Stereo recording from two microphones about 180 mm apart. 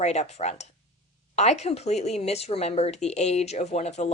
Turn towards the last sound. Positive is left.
turn(degrees=40)  # may be behind; listen again after turning